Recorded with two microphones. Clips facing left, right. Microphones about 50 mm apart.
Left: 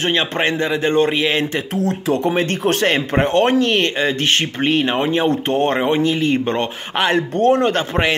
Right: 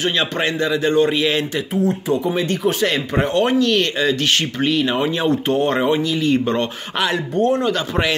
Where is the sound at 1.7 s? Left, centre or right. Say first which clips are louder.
Right 3 dB; left.